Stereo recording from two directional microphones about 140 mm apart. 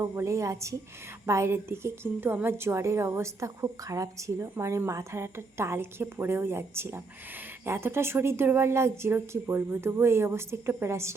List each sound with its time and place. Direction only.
0.0 s a woman's voice: 20° right (ahead or behind)